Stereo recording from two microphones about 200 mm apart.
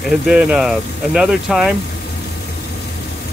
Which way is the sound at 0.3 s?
5° right (ahead or behind).